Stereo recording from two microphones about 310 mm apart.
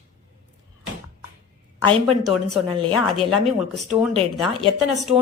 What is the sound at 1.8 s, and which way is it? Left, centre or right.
Speech, centre.